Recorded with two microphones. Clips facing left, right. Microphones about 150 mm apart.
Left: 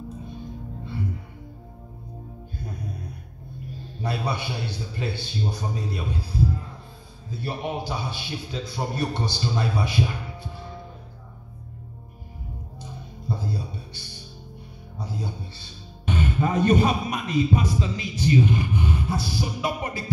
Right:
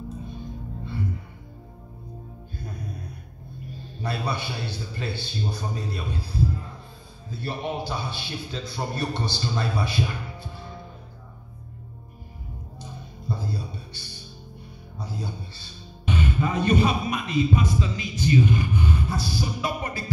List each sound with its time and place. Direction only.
4.0 s a man's voice: 15° left (ahead or behind)
7.2 s a man's voice: 15° left (ahead or behind)
13.3 s music: 15° left (ahead or behind)
16.1 s speech: 45° left (ahead or behind); by 20.1 s 20° left (ahead or behind)